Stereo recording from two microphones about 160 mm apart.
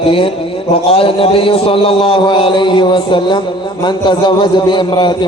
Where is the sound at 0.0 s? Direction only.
35° left (ahead or behind).